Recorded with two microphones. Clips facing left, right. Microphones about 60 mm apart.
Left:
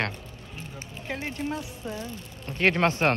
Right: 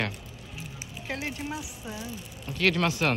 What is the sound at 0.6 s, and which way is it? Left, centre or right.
Speech, centre.